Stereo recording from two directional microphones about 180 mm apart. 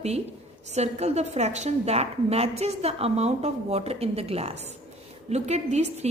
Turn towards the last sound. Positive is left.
turn(degrees=-40)  # may be behind; listen again after turning